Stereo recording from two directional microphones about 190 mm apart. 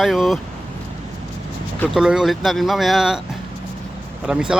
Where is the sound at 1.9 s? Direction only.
5° right (ahead or behind).